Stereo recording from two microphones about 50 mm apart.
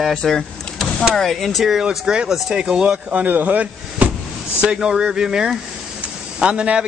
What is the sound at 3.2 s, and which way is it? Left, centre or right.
Speech, right.